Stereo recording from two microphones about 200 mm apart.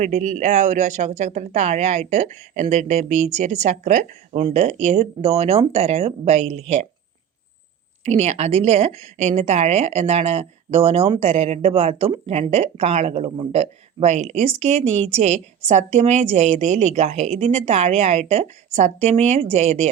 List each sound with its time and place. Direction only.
0.0 s a woman's voice: 35° right (ahead or behind)
8.0 s a woman's voice: 35° right (ahead or behind)